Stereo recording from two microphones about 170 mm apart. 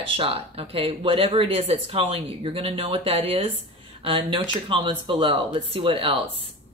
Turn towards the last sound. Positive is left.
turn(degrees=-35)  # may be behind; listen again after turning